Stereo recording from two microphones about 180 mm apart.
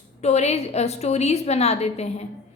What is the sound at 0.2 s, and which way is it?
A woman's voice, 35° left (ahead or behind).